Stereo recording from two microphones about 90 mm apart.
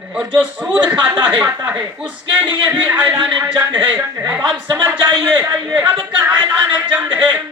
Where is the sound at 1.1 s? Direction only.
20° right (ahead or behind).